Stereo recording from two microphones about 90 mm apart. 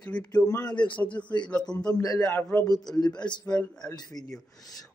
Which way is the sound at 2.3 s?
25° left (ahead or behind).